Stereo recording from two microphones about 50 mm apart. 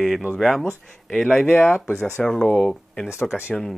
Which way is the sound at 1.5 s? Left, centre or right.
Left.